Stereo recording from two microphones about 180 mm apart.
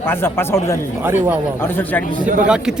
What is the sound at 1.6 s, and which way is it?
Speech, 10° left (ahead or behind).